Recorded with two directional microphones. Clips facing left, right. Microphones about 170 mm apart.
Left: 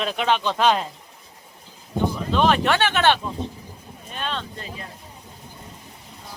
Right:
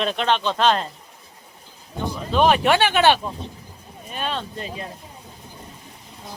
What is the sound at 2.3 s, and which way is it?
Speech, 10° right (ahead or behind).